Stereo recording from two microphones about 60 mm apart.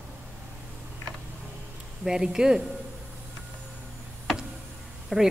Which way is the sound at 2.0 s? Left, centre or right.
Centre.